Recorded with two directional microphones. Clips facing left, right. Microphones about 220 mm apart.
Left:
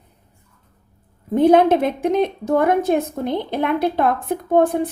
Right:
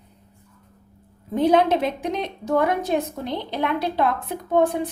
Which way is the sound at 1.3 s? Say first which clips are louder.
Left 5 dB; 50° left (ahead or behind).